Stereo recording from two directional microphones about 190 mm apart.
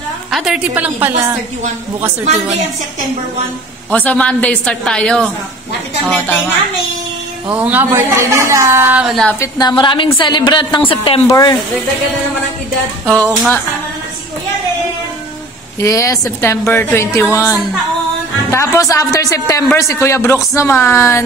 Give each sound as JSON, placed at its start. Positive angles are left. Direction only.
{"t": 0.3, "sound": "a woman's voice", "side_deg": -5}
{"t": 3.9, "sound": "a man's voice", "side_deg": 10}
{"t": 7.4, "sound": "a woman's voice", "side_deg": -10}
{"t": 9.4, "sound": "a woman's voice", "side_deg": 20}
{"t": 13.1, "sound": "speech", "side_deg": 5}
{"t": 15.8, "sound": "a man's voice", "side_deg": 15}